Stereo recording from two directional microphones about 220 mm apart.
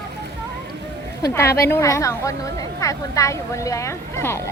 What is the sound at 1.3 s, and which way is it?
A woman's voice, 10° left (ahead or behind).